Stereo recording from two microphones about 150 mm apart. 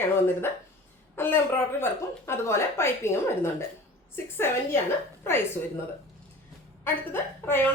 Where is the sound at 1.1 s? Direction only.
15° left (ahead or behind).